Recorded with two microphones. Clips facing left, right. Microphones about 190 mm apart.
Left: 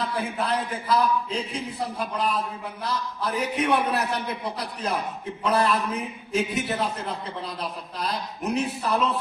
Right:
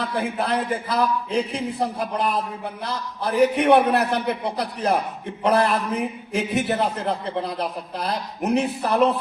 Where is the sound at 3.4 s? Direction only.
60° right (ahead or behind).